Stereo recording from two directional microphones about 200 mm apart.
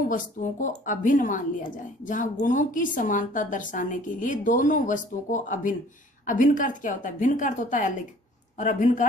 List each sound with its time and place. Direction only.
0.1 s a woman's voice: 40° left (ahead or behind)